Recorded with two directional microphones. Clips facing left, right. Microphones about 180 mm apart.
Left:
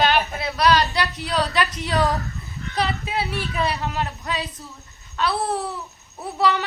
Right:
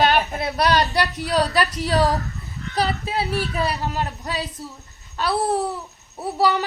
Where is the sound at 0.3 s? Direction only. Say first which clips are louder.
Even; 45° right (ahead or behind).